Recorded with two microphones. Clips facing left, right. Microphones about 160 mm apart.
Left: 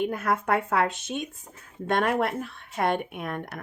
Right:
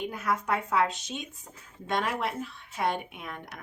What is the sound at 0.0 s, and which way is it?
Speech, 55° left (ahead or behind).